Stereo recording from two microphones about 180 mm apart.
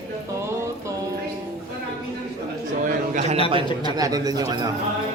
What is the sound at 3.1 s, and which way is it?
Speech, 40° right (ahead or behind).